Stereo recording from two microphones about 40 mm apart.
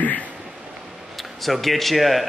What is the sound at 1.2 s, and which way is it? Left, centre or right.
Speech, centre.